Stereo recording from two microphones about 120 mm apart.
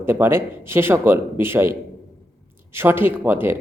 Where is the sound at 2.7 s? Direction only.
15° right (ahead or behind).